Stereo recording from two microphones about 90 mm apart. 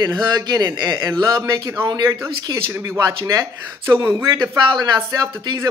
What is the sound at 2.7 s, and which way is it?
Speech, 35° right (ahead or behind).